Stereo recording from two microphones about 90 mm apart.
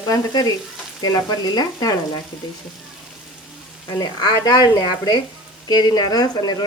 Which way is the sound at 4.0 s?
50° left (ahead or behind).